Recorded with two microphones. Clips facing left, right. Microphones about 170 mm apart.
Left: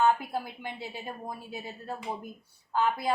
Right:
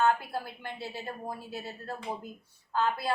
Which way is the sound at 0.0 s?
15° left (ahead or behind).